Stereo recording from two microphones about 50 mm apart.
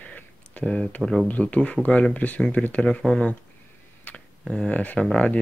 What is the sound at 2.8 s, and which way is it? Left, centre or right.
Speech, centre.